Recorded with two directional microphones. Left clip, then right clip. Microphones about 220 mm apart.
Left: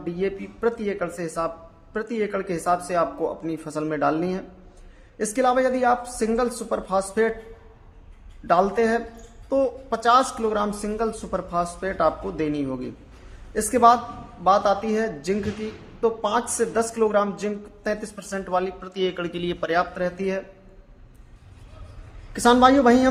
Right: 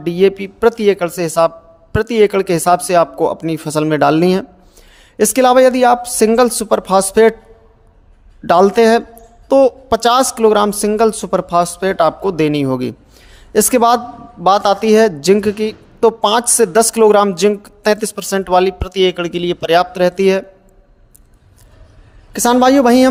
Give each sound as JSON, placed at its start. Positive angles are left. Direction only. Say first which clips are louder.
{"t": 0.0, "sound": "a woman's voice", "louder": "right 14 dB", "side_deg": -40}
{"t": 8.4, "sound": "a woman's voice", "louder": "right 10 dB", "side_deg": -40}
{"t": 22.3, "sound": "a woman's voice", "louder": "right 5 dB", "side_deg": -30}